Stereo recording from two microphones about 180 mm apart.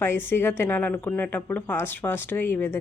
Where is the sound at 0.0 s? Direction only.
10° left (ahead or behind).